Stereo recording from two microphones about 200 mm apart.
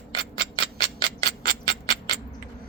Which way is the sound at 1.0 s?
45° right (ahead or behind).